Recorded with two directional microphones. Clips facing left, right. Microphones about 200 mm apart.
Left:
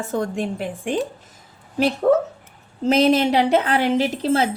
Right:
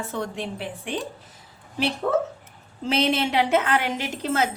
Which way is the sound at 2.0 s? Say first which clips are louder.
Left 6 dB; 40° left (ahead or behind).